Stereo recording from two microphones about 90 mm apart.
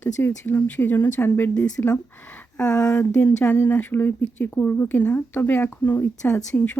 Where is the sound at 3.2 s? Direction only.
25° left (ahead or behind).